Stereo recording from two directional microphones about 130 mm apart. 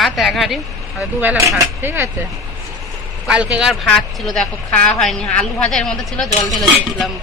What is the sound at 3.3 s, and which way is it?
Speech, 10° right (ahead or behind).